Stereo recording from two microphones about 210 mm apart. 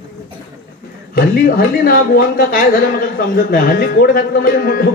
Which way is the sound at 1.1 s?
45° left (ahead or behind).